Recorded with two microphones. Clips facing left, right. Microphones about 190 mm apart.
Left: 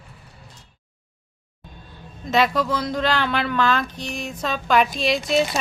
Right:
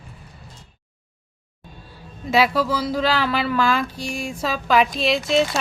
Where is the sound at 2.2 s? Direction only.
10° right (ahead or behind).